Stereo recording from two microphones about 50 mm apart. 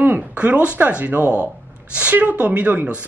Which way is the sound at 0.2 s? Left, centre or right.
Right.